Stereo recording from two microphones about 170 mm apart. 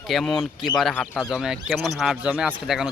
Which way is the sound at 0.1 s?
Centre (ahead or behind).